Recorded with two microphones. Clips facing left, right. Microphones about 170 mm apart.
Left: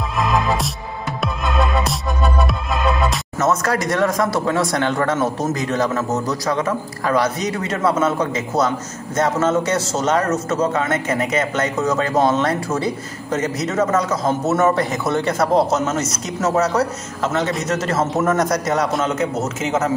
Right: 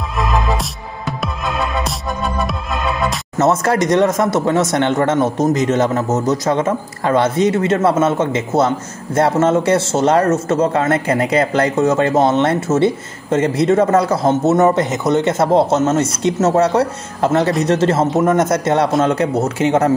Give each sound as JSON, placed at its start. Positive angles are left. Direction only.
{"t": 0.2, "sound": "music", "side_deg": 0}
{"t": 3.3, "sound": "a man's voice", "side_deg": -25}